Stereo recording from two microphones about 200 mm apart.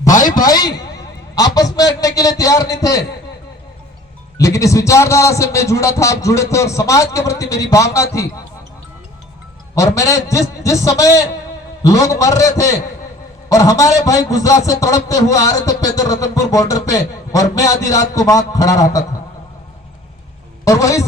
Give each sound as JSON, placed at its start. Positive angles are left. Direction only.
{"t": 0.1, "sound": "a sound", "side_deg": 40}
{"t": 0.4, "sound": "a man's voice", "side_deg": 20}
{"t": 4.4, "sound": "a man's voice", "side_deg": 15}
{"t": 9.7, "sound": "a man's voice", "side_deg": 15}
{"t": 20.7, "sound": "a man's voice", "side_deg": 15}